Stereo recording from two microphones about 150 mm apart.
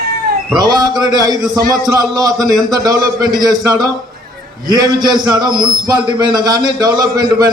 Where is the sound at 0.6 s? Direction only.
25° right (ahead or behind).